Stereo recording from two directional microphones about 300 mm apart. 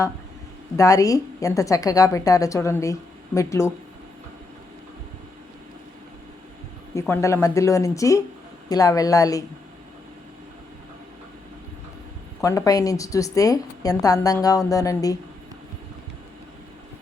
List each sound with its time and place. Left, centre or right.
0.8 s a woman's voice: centre
7.0 s a woman's voice: centre
12.4 s a woman's voice: centre